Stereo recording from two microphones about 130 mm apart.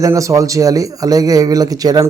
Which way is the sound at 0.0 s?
25° right (ahead or behind).